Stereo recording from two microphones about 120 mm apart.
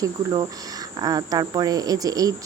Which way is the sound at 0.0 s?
35° right (ahead or behind).